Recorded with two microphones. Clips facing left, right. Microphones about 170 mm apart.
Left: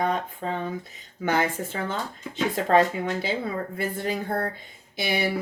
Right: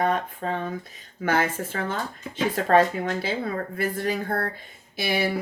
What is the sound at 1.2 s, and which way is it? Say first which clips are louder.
A woman's voice: even; 20° left (ahead or behind).